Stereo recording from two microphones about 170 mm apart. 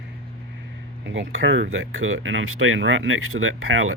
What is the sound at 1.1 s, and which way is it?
Speech, 90° right.